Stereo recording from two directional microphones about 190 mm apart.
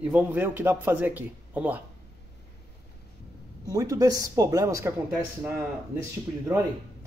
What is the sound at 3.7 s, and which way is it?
Speech, 20° right (ahead or behind).